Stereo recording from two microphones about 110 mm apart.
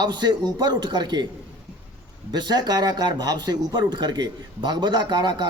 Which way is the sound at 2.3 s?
40° right (ahead or behind).